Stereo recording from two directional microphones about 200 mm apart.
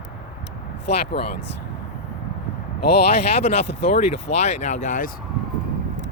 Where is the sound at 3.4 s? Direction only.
35° left (ahead or behind).